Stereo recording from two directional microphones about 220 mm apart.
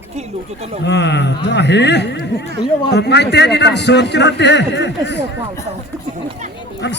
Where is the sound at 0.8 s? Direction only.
50° left (ahead or behind).